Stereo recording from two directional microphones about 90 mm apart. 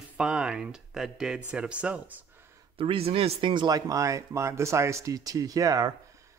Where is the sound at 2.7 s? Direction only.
85° right; by 5.9 s 45° right (ahead or behind).